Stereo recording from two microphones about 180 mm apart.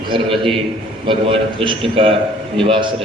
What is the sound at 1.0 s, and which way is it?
A man's voice, 30° right (ahead or behind).